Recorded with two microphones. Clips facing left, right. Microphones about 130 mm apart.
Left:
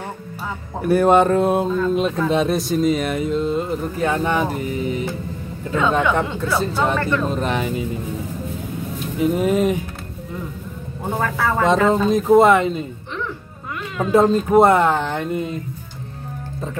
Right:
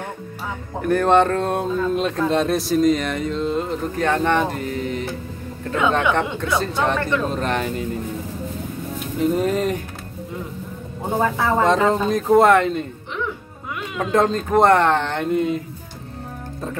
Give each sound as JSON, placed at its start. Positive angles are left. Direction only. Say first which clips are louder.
{"t": 0.8, "sound": "speech", "louder": "left 2 dB", "side_deg": 10}
{"t": 6.5, "sound": "speech", "louder": "left 1 dB", "side_deg": 5}
{"t": 9.2, "sound": "speech", "louder": "left 2 dB", "side_deg": 5}
{"t": 11.1, "sound": "speech", "louder": "right 2 dB", "side_deg": -20}
{"t": 11.6, "sound": "speech", "louder": "left 3 dB", "side_deg": 0}
{"t": 14.1, "sound": "speech", "louder": "left 4 dB", "side_deg": 10}